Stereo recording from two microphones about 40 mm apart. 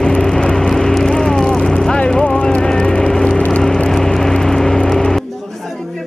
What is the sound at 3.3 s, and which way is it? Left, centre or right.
Vehicle, left.